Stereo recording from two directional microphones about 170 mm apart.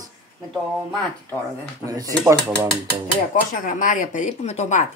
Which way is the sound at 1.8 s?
20° right (ahead or behind).